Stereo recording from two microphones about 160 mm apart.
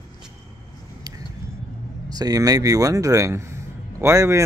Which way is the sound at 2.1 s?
25° right (ahead or behind).